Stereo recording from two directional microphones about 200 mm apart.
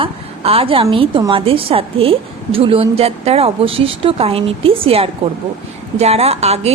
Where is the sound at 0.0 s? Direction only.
30° right (ahead or behind).